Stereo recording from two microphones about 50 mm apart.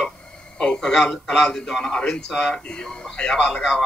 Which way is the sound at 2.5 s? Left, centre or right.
Centre.